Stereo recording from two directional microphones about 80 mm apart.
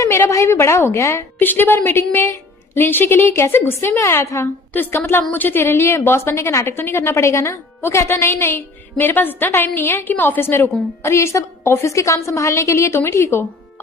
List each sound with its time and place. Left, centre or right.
0.0 s a woman's voice: left
1.4 s a woman's voice: left